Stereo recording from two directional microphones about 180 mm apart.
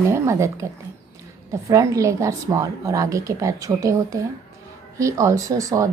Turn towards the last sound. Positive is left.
turn(degrees=-15)  # may be behind; listen again after turning